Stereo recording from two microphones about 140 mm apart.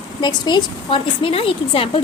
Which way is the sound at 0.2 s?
30° left (ahead or behind).